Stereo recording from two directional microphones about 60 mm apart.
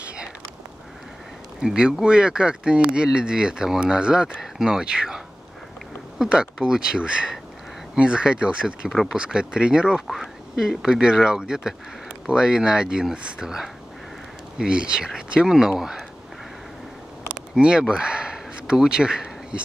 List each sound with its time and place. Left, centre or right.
1.6 s speech: centre
10.0 s speech: centre
17.6 s a sound: centre